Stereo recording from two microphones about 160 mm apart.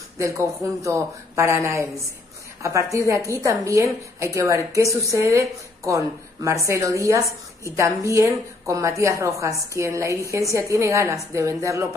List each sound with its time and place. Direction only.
0.2 s a woman's voice: 20° right (ahead or behind)